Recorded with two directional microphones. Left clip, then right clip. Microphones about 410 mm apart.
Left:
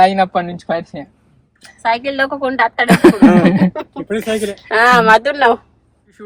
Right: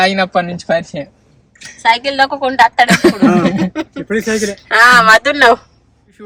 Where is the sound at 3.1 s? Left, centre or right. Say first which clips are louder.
Left 2 dB; left.